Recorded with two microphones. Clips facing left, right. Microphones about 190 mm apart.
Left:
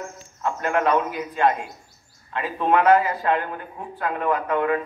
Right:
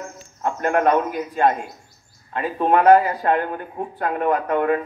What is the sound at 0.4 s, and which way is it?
A man's voice, 50° right (ahead or behind).